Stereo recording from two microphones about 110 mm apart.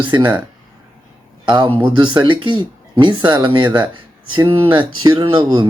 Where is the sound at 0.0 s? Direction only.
45° right (ahead or behind).